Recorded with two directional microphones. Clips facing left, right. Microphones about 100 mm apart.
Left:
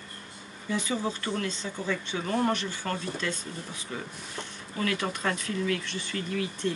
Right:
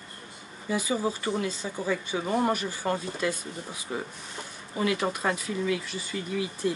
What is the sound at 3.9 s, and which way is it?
Speech, 25° right (ahead or behind).